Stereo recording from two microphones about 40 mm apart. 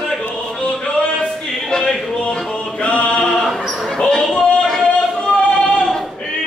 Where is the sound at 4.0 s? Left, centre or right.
Left.